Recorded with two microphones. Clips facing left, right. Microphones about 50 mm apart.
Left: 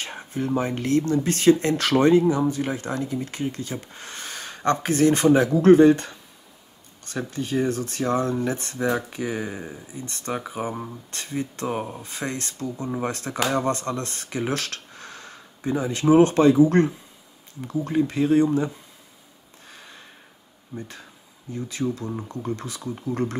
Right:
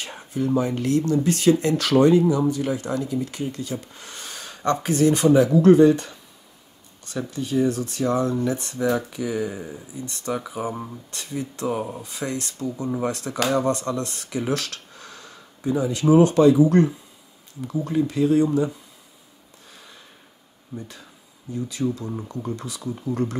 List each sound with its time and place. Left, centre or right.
0.0 s a sound: left
0.6 s speech: left
8.7 s speech: left
9.1 s speech: left
21.6 s speech: left